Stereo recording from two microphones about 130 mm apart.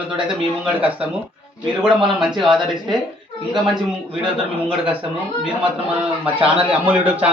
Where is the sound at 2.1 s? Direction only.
Centre (ahead or behind).